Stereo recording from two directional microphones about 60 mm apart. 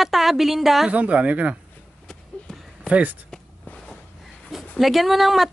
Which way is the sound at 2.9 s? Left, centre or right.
Right.